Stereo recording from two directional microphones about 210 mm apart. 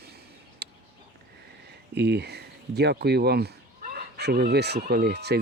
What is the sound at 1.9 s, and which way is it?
Speech, 50° right (ahead or behind).